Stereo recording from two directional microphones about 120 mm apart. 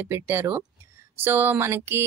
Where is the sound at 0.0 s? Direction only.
15° right (ahead or behind).